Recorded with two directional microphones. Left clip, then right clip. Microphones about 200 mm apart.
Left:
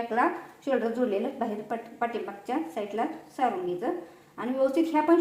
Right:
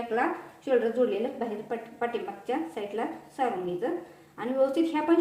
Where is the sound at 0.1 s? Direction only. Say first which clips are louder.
Left 1 dB; 25° left (ahead or behind).